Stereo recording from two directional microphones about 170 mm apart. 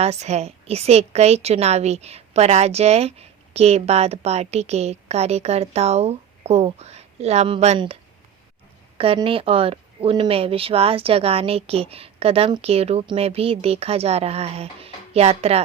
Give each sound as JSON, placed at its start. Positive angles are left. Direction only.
{"t": 0.0, "sound": "a woman's voice", "side_deg": -40}
{"t": 9.0, "sound": "a woman's voice", "side_deg": -30}